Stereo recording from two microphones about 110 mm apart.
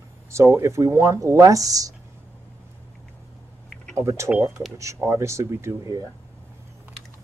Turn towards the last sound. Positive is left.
turn(degrees=-30)  # may be behind; listen again after turning